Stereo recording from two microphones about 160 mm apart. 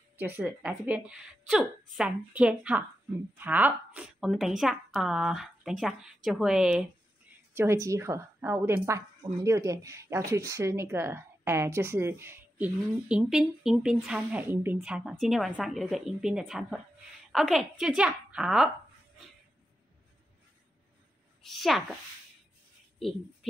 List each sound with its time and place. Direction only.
0.2 s a woman's voice: 10° right (ahead or behind)
7.5 s a woman's voice: 20° right (ahead or behind)
21.4 s speech: centre (ahead or behind)